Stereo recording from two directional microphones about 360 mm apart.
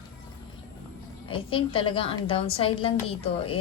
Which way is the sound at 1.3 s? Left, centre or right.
Centre.